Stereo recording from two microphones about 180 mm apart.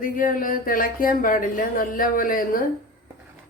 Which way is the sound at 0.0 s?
50° left (ahead or behind).